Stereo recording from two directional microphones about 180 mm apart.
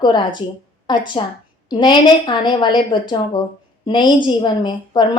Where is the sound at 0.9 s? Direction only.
25° left (ahead or behind).